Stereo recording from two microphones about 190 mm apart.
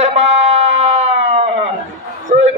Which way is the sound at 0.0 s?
35° right (ahead or behind).